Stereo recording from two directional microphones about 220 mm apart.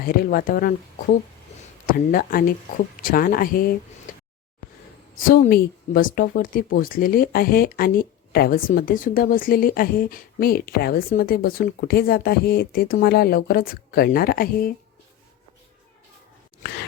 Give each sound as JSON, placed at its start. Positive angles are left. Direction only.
{"t": 0.0, "sound": "speech", "side_deg": 40}
{"t": 1.9, "sound": "speech", "side_deg": 40}
{"t": 4.1, "sound": "a sound", "side_deg": 40}
{"t": 5.1, "sound": "speech", "side_deg": 40}